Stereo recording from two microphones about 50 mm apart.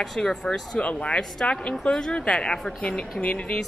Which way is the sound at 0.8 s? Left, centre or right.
Left.